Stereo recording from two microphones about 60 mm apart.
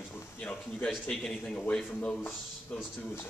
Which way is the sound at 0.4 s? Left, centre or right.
Centre.